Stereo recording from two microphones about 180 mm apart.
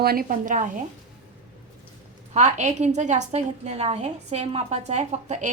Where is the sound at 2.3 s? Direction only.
40° right (ahead or behind).